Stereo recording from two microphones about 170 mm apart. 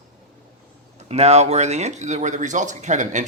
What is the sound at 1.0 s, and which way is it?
A man's voice, 40° right (ahead or behind).